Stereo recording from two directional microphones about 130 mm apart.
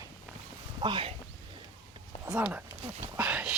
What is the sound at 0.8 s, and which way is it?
Speech, 40° right (ahead or behind).